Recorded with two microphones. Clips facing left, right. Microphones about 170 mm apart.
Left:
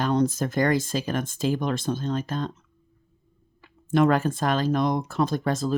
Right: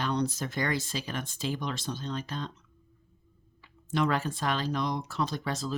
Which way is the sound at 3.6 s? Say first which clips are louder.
Left 8 dB; 50° left (ahead or behind).